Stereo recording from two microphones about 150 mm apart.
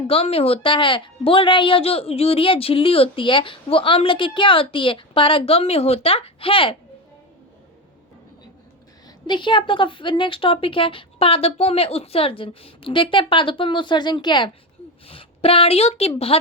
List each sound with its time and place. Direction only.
0.1 s a woman's voice: 40° left (ahead or behind)
9.0 s a woman's voice: 30° left (ahead or behind)